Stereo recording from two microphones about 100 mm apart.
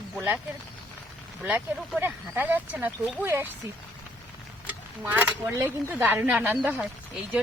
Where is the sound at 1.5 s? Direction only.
15° right (ahead or behind).